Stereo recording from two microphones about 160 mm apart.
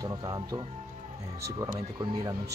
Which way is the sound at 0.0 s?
25° right (ahead or behind).